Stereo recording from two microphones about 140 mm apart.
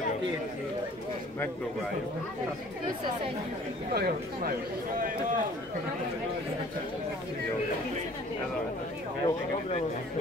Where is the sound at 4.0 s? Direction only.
90° right.